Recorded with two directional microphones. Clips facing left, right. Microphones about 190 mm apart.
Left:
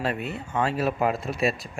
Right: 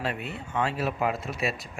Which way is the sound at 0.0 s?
40° left (ahead or behind).